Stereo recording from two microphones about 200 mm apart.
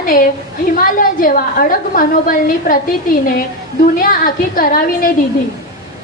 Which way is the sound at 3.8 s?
45° left (ahead or behind).